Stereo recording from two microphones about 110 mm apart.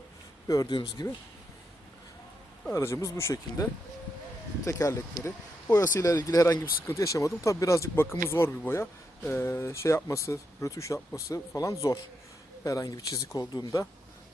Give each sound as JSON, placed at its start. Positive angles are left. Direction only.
{"t": 0.4, "sound": "speech", "side_deg": 35}
{"t": 2.7, "sound": "speech", "side_deg": 25}